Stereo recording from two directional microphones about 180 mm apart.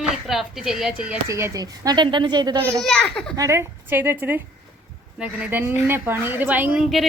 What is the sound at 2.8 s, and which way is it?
Speech, 5° left (ahead or behind).